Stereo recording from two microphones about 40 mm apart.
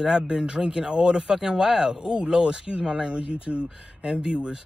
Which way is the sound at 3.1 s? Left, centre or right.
Right.